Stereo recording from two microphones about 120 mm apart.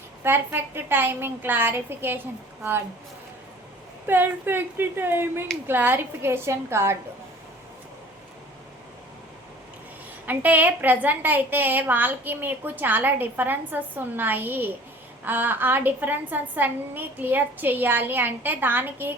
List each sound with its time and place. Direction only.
0.2 s a woman's voice: 15° right (ahead or behind)
4.0 s a woman's voice: 15° right (ahead or behind)
10.2 s a woman's voice: 15° right (ahead or behind)